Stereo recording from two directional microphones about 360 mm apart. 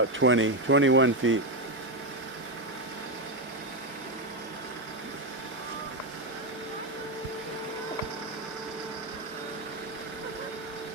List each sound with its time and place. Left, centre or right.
0.0 s speech: right